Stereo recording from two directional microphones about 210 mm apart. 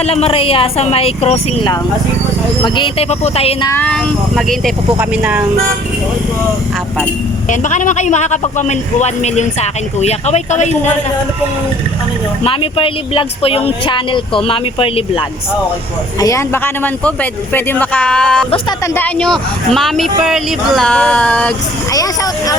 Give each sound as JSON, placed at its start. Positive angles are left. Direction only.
{"t": 0.0, "sound": "speech", "side_deg": 30}
{"t": 3.7, "sound": "speech", "side_deg": 5}
{"t": 7.5, "sound": "a man's voice", "side_deg": 35}
{"t": 12.5, "sound": "speech", "side_deg": 25}
{"t": 16.2, "sound": "speech", "side_deg": 15}
{"t": 21.9, "sound": "speech", "side_deg": 15}